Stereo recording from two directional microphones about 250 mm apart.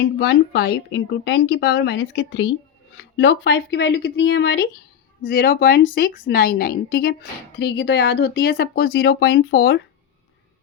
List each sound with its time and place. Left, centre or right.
0.2 s a woman's voice: left